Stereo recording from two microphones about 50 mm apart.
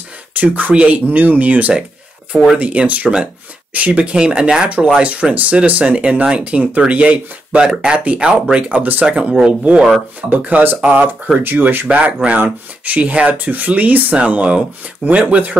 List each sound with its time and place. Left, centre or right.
0.3 s speech: right; by 8.6 s centre
8.6 s speech: right
9.0 s speech: right
10.3 s speech: right
11.4 s speech: right
12.0 s speech: right